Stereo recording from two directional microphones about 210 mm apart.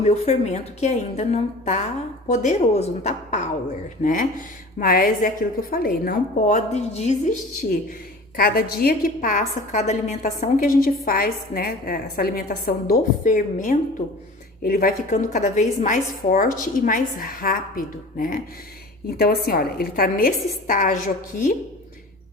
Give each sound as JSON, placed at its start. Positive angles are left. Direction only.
{"t": 0.0, "sound": "a woman's voice", "side_deg": 30}
{"t": 8.4, "sound": "a woman's voice", "side_deg": 45}